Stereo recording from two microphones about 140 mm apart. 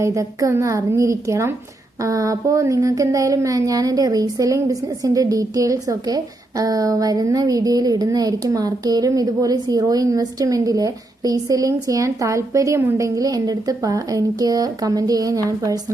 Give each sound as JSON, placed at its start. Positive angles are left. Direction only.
{"t": 0.0, "sound": "speech", "side_deg": -25}